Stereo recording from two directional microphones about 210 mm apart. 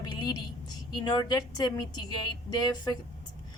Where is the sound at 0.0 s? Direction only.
20° left (ahead or behind).